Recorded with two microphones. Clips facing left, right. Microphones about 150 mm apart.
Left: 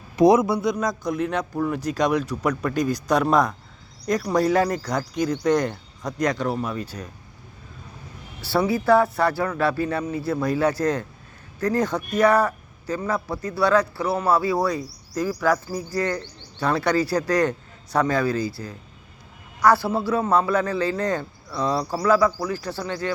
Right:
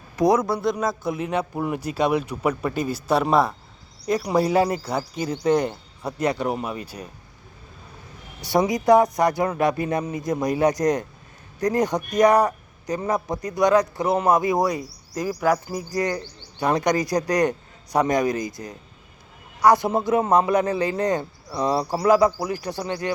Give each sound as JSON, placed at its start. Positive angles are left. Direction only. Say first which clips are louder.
{"t": 0.2, "sound": "a man's voice", "louder": "left 3 dB", "side_deg": 25}
{"t": 0.4, "sound": "a man's voice", "louder": "even", "side_deg": 0}
{"t": 8.4, "sound": "a man's voice", "louder": "right 1 dB", "side_deg": -15}